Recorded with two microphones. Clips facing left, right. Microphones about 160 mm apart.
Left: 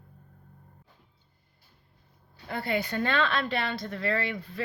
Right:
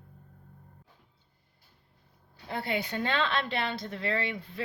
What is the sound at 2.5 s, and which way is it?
A woman's voice, 25° right (ahead or behind).